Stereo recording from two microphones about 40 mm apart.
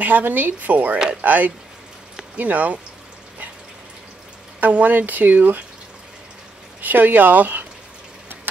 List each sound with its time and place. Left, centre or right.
0.0 s speech: right
4.6 s speech: right
6.8 s speech: right